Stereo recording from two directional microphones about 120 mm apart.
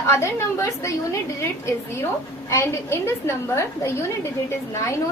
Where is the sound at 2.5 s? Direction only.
20° left (ahead or behind).